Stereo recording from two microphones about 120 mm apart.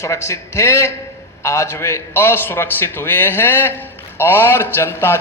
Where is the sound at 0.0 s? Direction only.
25° left (ahead or behind).